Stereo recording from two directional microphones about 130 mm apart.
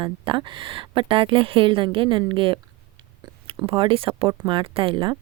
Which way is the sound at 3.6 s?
45° right (ahead or behind).